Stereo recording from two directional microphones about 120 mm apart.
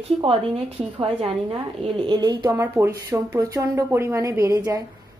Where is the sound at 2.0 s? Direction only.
35° right (ahead or behind).